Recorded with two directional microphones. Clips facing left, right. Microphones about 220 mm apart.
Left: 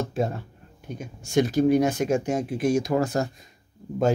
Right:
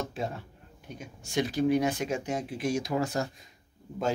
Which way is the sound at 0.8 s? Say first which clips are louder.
Left 7 dB; 45° left (ahead or behind).